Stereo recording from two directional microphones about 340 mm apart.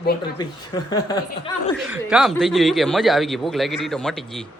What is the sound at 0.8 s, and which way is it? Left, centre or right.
Speech, centre.